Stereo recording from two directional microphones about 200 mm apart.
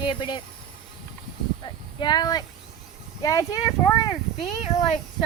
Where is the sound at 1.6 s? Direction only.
20° left (ahead or behind).